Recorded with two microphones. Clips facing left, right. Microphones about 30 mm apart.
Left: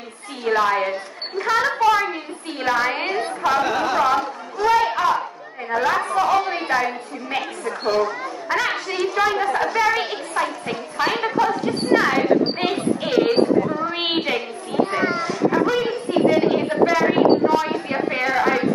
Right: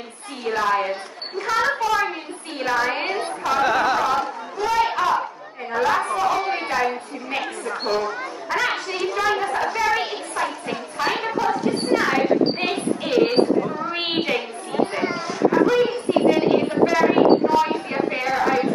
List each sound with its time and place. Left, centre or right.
0.5 s a woman's voice: centre
3.6 s a sound: right
3.9 s a woman's voice: centre